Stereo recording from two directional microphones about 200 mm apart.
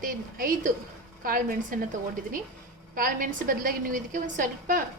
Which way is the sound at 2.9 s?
45° right (ahead or behind).